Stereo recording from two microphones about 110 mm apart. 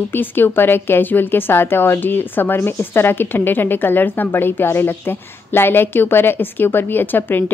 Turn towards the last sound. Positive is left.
turn(degrees=15)  # may be behind; listen again after turning